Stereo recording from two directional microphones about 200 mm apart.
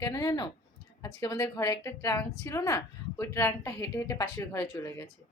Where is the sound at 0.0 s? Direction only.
20° left (ahead or behind).